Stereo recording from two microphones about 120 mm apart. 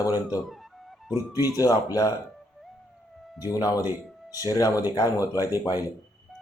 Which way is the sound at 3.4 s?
30° left (ahead or behind).